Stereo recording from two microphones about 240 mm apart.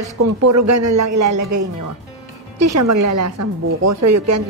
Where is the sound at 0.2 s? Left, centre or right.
Right.